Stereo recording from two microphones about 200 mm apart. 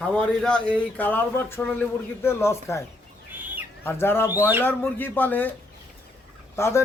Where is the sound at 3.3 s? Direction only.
10° right (ahead or behind).